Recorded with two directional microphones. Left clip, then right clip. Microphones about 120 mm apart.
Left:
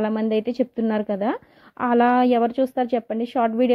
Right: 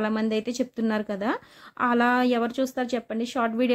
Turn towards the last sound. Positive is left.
turn(degrees=35)  # may be behind; listen again after turning